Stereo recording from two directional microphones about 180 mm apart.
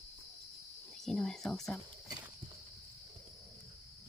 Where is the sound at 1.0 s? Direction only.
5° left (ahead or behind).